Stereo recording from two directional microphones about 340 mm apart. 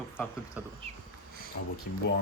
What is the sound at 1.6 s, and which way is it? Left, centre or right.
Speech, left.